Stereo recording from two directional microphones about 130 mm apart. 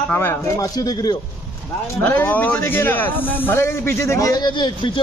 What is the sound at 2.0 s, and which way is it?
A man's voice, 15° left (ahead or behind).